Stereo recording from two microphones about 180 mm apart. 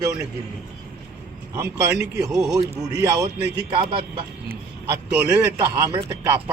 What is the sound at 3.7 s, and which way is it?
Speech, 30° right (ahead or behind).